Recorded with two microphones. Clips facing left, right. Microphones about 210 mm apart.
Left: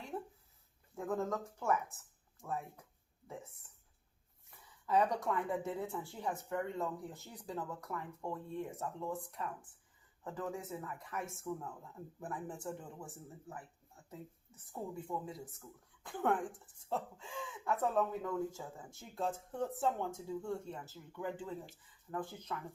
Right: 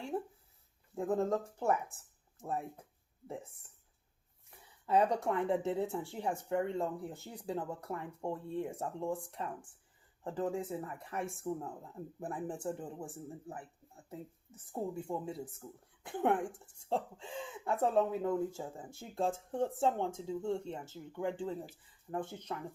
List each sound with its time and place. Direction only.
0.1 s a sound: 30° right (ahead or behind)
0.9 s speech: 30° right (ahead or behind)
4.9 s speech: 25° right (ahead or behind)